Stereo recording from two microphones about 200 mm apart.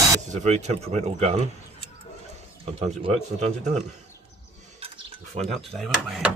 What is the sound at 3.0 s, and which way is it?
Speech, 35° right (ahead or behind).